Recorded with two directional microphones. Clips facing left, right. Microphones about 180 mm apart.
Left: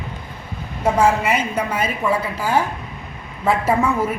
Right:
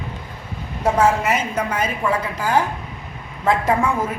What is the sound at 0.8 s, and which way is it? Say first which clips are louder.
A woman's voice: even; 10° left (ahead or behind).